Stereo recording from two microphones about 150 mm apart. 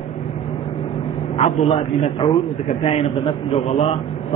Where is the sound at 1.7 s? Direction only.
35° left (ahead or behind).